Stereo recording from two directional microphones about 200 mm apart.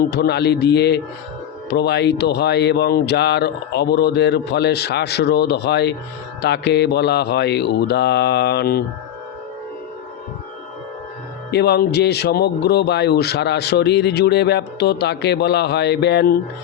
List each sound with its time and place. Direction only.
0.0 s speech: 55° left (ahead or behind)
11.5 s speech: 55° left (ahead or behind)